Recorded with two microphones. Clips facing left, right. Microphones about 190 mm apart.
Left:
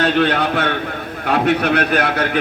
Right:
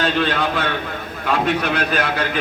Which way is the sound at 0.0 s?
65° left (ahead or behind).